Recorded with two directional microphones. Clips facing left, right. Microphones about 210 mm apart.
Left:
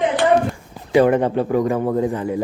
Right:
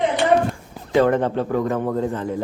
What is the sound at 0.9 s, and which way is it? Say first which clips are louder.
Speech: left 3 dB; 15° left (ahead or behind).